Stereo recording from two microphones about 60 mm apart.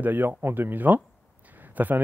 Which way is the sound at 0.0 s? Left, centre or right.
Right.